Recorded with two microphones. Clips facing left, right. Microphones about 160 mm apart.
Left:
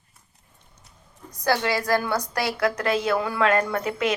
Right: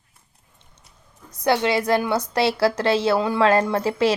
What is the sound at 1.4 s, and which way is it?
A woman's voice, 20° right (ahead or behind).